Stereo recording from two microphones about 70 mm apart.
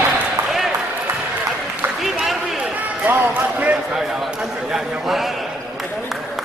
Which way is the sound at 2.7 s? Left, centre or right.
Right.